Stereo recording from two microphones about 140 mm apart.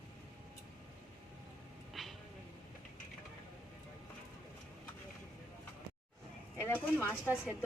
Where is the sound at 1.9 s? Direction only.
Centre (ahead or behind).